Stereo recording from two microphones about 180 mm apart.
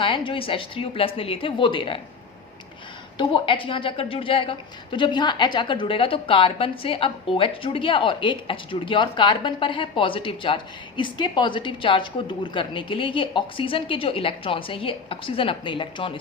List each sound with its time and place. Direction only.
0.0 s a woman's voice: 30° left (ahead or behind)
3.2 s a woman's voice: 25° left (ahead or behind)